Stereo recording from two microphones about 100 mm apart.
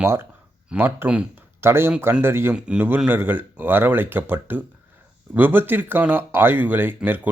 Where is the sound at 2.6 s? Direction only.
10° right (ahead or behind).